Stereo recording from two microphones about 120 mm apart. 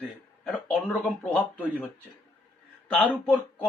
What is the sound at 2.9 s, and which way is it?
Speech, 10° left (ahead or behind).